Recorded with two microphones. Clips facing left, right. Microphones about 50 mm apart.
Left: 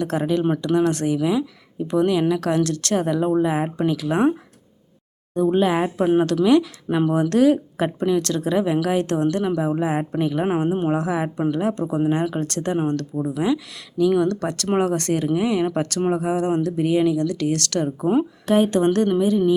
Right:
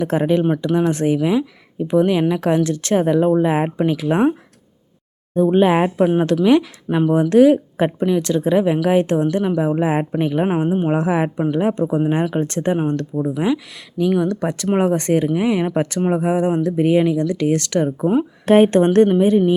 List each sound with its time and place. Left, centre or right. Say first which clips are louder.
0.0 s speech: right 4 dB; right
0.4 s speech: right 2 dB; centre; by 6.1 s right
6.3 s speech: right 2 dB; centre
9.7 s speech: right 3 dB; right; by 10.8 s centre
10.8 s speech: right 4 dB; right
18.4 s speech: right 7 dB; right